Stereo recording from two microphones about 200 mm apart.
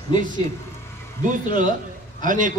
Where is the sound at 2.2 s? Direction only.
40° right (ahead or behind).